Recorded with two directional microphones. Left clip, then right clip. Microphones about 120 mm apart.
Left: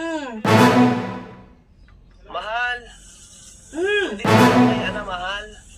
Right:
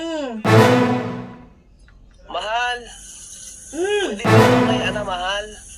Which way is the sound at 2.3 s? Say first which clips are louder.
Right 2 dB; 35° right (ahead or behind).